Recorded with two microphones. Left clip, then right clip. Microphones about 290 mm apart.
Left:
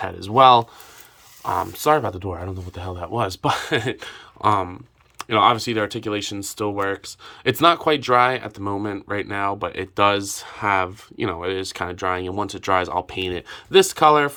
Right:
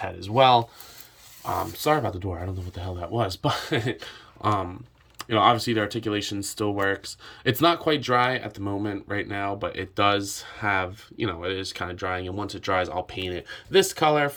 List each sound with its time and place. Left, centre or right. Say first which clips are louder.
0.0 s speech: left 6 dB; centre